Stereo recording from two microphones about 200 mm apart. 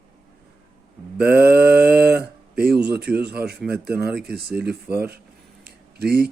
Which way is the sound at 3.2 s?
55° right (ahead or behind).